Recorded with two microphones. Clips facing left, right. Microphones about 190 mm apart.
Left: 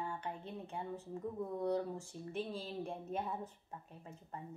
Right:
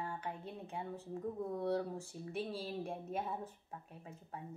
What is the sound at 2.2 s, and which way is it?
Speech, 5° right (ahead or behind).